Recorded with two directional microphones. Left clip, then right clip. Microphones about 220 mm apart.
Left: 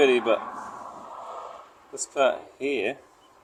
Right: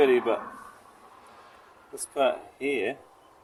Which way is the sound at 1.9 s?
10° left (ahead or behind).